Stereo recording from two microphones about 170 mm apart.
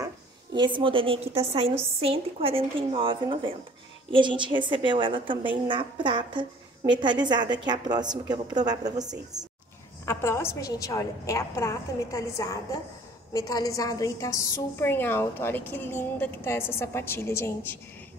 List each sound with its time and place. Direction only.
0.6 s a woman's voice: 30° right (ahead or behind)
10.0 s a woman's voice: 15° left (ahead or behind)